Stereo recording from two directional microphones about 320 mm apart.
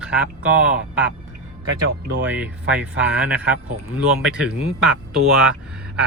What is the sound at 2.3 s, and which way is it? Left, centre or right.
Speech, centre.